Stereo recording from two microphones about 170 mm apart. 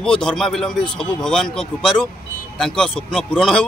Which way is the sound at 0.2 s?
5° left (ahead or behind).